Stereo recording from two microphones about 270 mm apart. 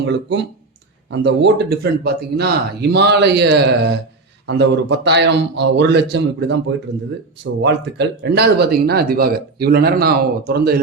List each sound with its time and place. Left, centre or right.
0.0 s speech: right